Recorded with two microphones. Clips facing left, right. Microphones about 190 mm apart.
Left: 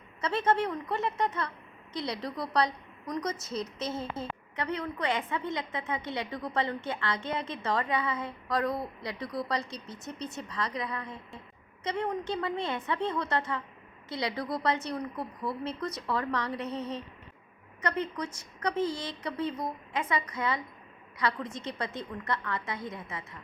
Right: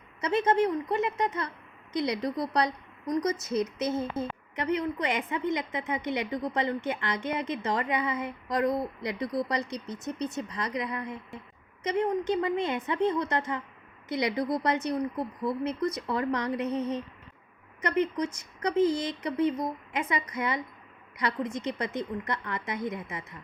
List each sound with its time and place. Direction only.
0.2 s a woman's voice: 15° right (ahead or behind)